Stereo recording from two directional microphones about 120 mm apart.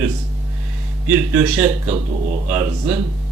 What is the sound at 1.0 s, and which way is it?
Speech, 15° right (ahead or behind).